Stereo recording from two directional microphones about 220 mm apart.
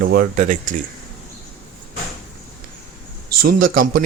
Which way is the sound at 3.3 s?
40° right (ahead or behind).